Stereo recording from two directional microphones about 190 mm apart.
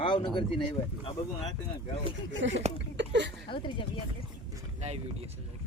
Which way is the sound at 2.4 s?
80° right.